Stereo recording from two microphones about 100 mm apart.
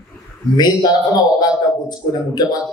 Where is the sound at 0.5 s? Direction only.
45° left (ahead or behind).